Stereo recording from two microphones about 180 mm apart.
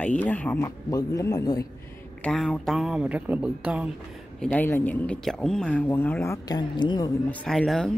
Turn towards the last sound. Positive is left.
turn(degrees=0)  # may be behind; listen again after turning